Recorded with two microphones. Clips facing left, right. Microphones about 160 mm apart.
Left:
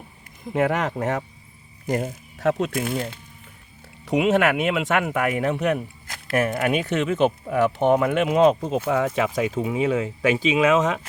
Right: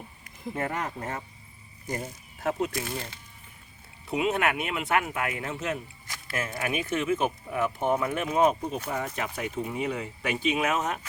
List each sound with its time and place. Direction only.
0.5 s speech: 80° left; by 3.2 s 60° left (ahead or behind)
4.0 s speech: 90° left